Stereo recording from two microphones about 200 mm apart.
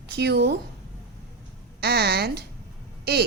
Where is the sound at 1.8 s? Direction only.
55° right (ahead or behind).